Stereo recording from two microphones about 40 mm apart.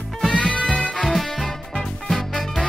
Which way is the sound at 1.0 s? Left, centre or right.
Centre.